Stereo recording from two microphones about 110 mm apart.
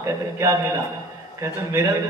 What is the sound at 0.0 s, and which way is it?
A man's voice, 25° right (ahead or behind).